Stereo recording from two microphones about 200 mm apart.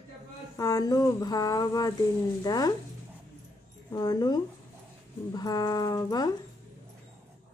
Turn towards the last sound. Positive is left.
turn(degrees=20)  # may be behind; listen again after turning